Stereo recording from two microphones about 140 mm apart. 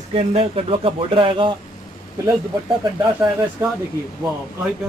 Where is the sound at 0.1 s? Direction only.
45° right (ahead or behind).